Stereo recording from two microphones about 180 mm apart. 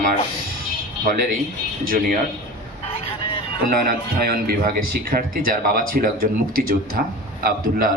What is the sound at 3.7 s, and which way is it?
Speech, 55° right (ahead or behind).